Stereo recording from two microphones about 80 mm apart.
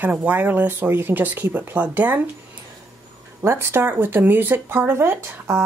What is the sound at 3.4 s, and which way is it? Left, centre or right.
Speech, right.